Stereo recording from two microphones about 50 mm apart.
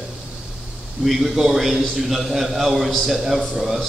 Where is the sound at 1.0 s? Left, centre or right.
Centre.